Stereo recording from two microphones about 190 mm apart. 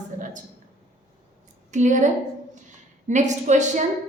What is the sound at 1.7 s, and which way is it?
Speech, 40° right (ahead or behind).